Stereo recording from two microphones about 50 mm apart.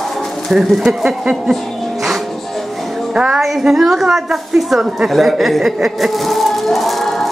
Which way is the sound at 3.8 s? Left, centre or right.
Centre.